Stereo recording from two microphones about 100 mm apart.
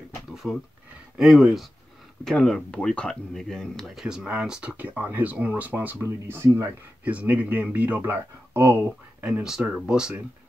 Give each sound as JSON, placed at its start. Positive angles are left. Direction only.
{"t": 0.3, "sound": "a sound", "side_deg": -5}
{"t": 1.1, "sound": "speech", "side_deg": 0}
{"t": 7.1, "sound": "speech", "side_deg": -15}
{"t": 9.2, "sound": "speech", "side_deg": -5}